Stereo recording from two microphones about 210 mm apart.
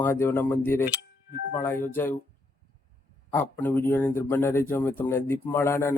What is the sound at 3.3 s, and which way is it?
Speech, 10° left (ahead or behind).